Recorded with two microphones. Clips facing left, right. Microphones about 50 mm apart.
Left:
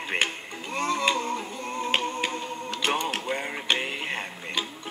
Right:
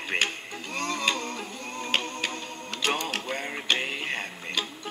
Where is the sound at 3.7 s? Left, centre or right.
Centre.